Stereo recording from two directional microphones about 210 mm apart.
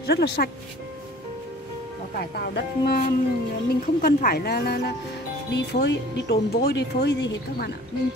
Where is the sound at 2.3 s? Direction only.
50° left (ahead or behind).